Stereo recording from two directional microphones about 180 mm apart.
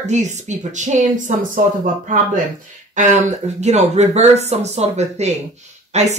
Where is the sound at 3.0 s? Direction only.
40° right (ahead or behind).